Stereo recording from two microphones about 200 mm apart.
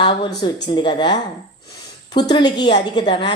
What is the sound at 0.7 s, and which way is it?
A woman's voice, 20° left (ahead or behind).